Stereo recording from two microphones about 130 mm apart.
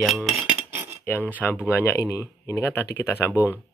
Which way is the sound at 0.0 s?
Centre (ahead or behind).